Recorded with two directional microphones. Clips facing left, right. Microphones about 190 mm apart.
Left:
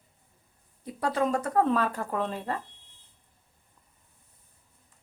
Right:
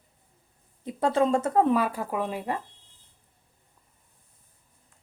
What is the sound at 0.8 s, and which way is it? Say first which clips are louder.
Speech: right 4 dB; 25° right (ahead or behind).